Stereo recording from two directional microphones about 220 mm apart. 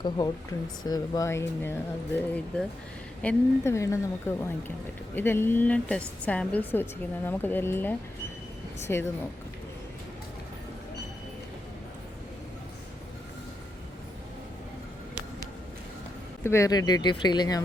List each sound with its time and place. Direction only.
0.9 s speech: 15° left (ahead or behind)
16.4 s speech: 10° left (ahead or behind)